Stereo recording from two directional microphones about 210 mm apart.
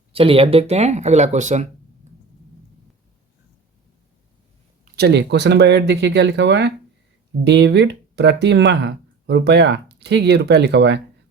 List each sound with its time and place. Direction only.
0.1 s speech: 25° right (ahead or behind)
4.9 s speech: 50° right (ahead or behind)